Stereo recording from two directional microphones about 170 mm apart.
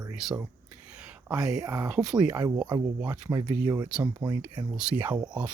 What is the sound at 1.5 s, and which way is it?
Speech, 20° right (ahead or behind).